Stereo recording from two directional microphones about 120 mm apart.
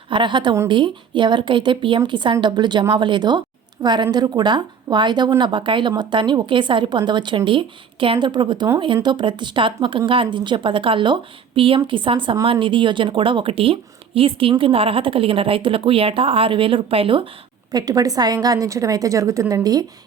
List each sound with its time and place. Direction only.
0.1 s a woman's voice: 40° right (ahead or behind)
17.7 s a woman's voice: 30° right (ahead or behind)